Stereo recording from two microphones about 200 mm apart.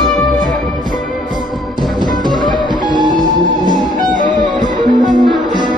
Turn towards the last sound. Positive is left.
turn(degrees=-20)  # may be behind; listen again after turning